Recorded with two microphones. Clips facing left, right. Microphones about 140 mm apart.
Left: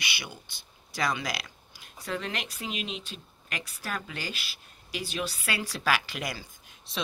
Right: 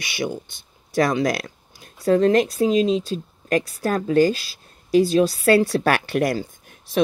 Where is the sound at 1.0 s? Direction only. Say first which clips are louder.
Right 10 dB; 45° right (ahead or behind).